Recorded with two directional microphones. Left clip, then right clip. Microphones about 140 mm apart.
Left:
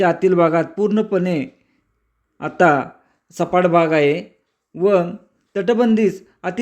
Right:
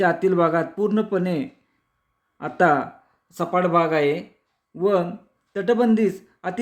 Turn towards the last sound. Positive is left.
turn(degrees=20)  # may be behind; listen again after turning